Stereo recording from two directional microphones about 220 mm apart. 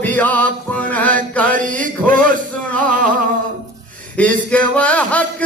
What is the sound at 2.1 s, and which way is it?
Music, 40° right (ahead or behind).